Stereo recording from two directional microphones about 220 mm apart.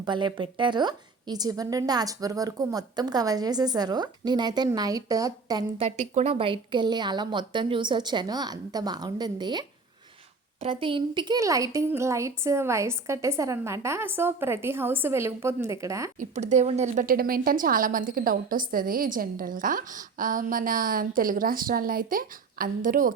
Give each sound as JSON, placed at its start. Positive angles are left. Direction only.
{"t": 0.0, "sound": "a woman's voice", "side_deg": -20}
{"t": 16.3, "sound": "a woman's voice", "side_deg": -30}